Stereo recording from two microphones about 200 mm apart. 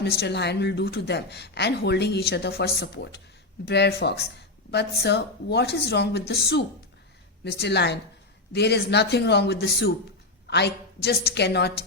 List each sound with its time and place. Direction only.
0.0 s a woman's voice: 55° left (ahead or behind)